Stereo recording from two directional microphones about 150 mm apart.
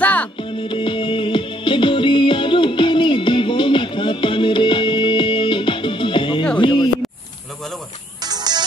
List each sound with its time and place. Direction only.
0.0 s music: 10° left (ahead or behind)
0.4 s music: 35° left (ahead or behind)
6.6 s a sound: 30° left (ahead or behind)
8.2 s music: 25° right (ahead or behind)